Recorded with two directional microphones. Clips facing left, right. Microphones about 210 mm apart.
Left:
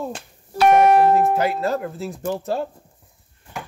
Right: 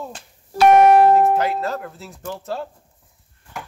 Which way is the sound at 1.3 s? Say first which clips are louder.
Left 1 dB; 10° left (ahead or behind).